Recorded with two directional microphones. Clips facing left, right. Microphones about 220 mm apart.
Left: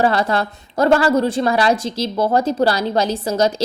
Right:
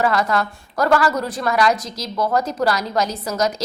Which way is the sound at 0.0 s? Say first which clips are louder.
Left 2 dB; 30° left (ahead or behind).